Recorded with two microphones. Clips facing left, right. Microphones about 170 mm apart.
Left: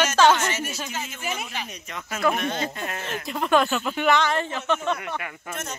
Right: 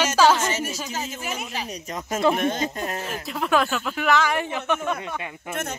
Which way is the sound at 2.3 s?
45° right (ahead or behind).